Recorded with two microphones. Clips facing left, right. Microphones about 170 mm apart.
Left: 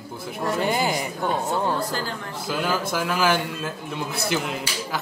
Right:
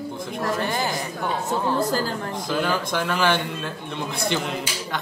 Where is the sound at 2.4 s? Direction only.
5° left (ahead or behind).